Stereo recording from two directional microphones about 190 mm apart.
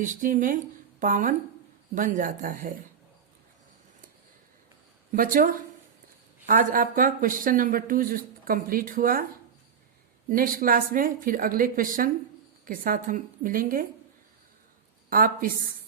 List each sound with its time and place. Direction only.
0.0 s speech: 40° right (ahead or behind)
5.1 s speech: 45° right (ahead or behind)
10.2 s speech: 45° right (ahead or behind)
15.1 s speech: 50° right (ahead or behind)